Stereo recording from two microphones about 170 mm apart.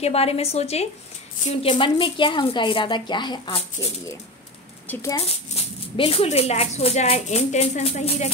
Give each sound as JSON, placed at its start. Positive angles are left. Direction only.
{"t": 0.0, "sound": "a woman's voice", "side_deg": 35}
{"t": 5.2, "sound": "speech", "side_deg": 35}